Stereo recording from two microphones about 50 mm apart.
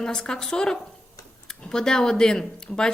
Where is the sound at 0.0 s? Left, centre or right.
Centre.